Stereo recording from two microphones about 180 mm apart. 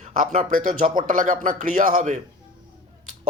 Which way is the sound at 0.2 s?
50° right (ahead or behind).